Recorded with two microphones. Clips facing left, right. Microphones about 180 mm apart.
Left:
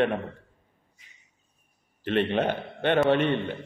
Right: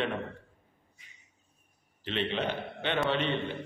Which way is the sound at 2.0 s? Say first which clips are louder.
Left 7 dB; 55° left (ahead or behind).